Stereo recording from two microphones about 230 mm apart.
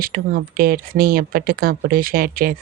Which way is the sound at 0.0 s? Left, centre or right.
Right.